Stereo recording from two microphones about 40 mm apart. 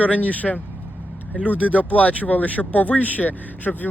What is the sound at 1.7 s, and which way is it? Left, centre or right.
Speech, left.